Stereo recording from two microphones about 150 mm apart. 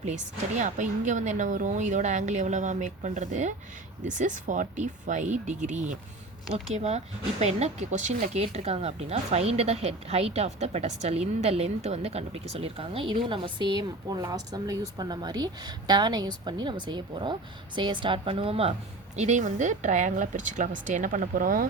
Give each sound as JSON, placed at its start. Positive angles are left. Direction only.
{"t": 0.0, "sound": "a woman's voice", "side_deg": -50}
{"t": 19.1, "sound": "speech", "side_deg": -50}